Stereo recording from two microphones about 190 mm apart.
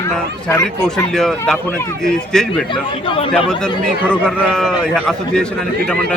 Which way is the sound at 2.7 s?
25° left (ahead or behind).